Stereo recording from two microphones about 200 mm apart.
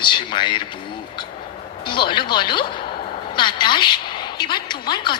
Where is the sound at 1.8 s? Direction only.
25° left (ahead or behind).